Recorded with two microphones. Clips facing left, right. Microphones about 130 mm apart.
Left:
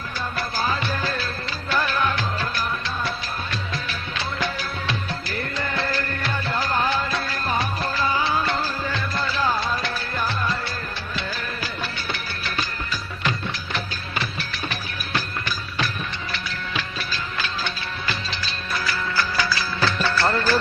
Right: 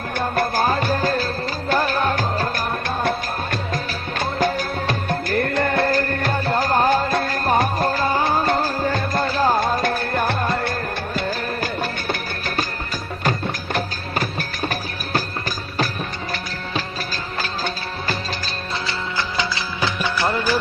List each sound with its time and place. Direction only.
0.2 s music: 55° right (ahead or behind)
13.7 s music: 45° right (ahead or behind)
17.3 s music: 40° right (ahead or behind)
18.9 s music of bollywood: 20° right (ahead or behind)